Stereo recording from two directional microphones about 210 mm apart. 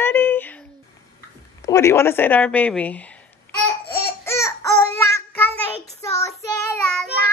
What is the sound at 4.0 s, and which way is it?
Babbling, 10° left (ahead or behind).